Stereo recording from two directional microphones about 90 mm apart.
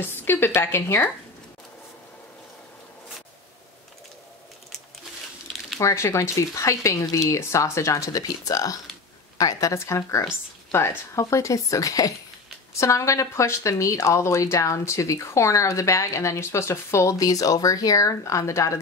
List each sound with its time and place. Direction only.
0.0 s a woman's voice: 25° left (ahead or behind)
5.8 s a woman's voice: 35° left (ahead or behind)